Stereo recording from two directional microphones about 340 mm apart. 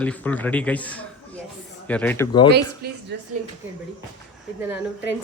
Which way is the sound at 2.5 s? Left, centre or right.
Right.